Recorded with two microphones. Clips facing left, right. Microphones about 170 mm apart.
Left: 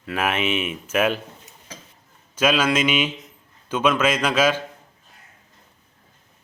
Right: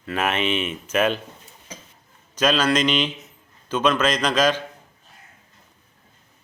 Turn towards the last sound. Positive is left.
turn(degrees=5)  # may be behind; listen again after turning